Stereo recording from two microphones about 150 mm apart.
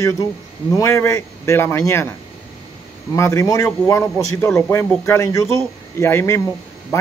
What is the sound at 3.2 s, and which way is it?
A man's voice, 15° left (ahead or behind).